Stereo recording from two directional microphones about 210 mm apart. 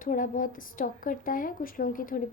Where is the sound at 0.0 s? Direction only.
40° left (ahead or behind).